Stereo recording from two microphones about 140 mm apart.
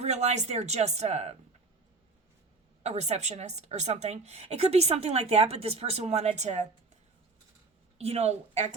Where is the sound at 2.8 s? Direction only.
55° right (ahead or behind).